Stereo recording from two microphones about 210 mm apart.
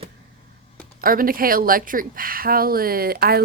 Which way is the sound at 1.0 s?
40° right (ahead or behind).